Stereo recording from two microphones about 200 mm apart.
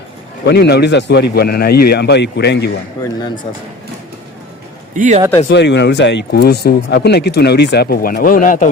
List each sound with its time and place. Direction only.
0.4 s speech: 55° left (ahead or behind)
3.0 s speech: 20° left (ahead or behind)
4.9 s a man's voice: 40° right (ahead or behind)
5.5 s speech: 60° left (ahead or behind); by 8.7 s 40° left (ahead or behind)